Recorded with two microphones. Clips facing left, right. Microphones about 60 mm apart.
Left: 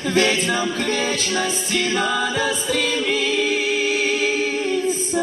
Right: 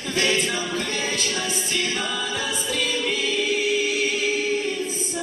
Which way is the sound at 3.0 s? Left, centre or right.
Left.